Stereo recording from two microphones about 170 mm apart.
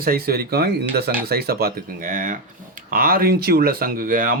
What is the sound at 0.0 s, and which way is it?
Speech, 60° right (ahead or behind).